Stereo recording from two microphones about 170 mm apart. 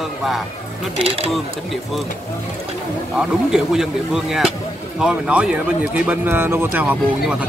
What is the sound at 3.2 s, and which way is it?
A man's voice, 5° right (ahead or behind).